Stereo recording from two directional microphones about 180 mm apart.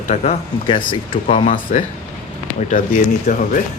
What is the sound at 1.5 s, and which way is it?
Speech, 50° left (ahead or behind).